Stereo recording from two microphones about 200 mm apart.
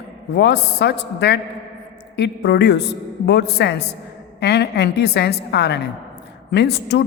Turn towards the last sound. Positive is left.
turn(degrees=55)  # may be behind; listen again after turning